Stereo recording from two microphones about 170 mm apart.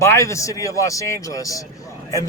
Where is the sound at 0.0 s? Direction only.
15° left (ahead or behind).